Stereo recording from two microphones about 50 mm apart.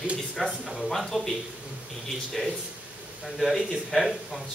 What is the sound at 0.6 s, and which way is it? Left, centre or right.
Speech, centre.